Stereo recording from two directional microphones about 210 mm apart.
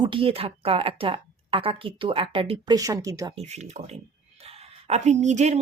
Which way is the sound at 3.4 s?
30° right (ahead or behind).